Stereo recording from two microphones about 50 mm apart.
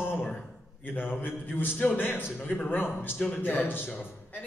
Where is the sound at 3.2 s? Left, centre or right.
Left.